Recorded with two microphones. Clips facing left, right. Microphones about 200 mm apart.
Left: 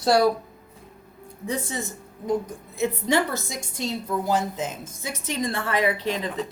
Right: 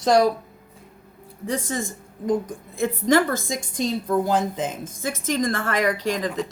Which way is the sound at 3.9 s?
50° right (ahead or behind).